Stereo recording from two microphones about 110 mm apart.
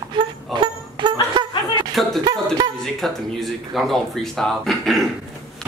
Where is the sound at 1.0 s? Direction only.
50° right (ahead or behind).